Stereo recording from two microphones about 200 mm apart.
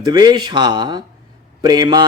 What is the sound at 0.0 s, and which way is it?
A man's voice, 20° right (ahead or behind).